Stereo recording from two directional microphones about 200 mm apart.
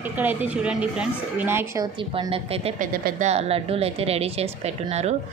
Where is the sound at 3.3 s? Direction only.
30° right (ahead or behind).